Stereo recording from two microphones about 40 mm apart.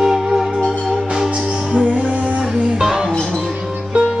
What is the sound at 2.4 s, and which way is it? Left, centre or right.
Music, centre.